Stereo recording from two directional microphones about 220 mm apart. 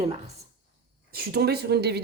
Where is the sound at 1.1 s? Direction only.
45° right (ahead or behind).